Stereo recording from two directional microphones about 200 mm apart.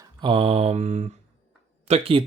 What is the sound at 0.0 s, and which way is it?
Mantra, 25° right (ahead or behind).